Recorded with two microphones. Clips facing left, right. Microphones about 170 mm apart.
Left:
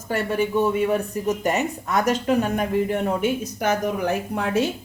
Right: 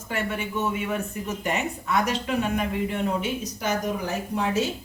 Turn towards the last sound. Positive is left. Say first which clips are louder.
# left 3 dB
turn(degrees=60)  # may be behind; listen again after turning